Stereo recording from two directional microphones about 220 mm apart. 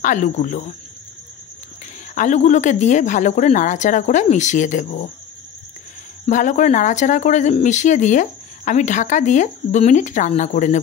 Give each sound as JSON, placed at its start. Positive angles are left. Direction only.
{"t": 0.0, "sound": "speech", "side_deg": 35}
{"t": 2.1, "sound": "speech", "side_deg": 35}
{"t": 6.2, "sound": "speech", "side_deg": 35}